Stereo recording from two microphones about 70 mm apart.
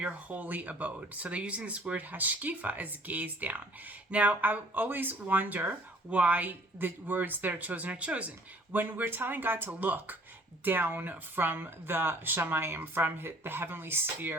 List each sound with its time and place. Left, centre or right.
0.0 s speech: right